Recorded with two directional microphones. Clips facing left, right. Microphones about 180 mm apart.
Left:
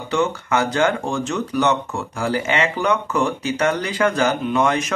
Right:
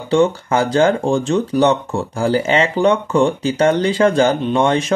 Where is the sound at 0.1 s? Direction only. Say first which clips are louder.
Right 6 dB; 30° right (ahead or behind).